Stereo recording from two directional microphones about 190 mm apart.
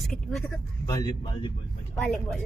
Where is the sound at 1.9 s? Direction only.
Centre (ahead or behind).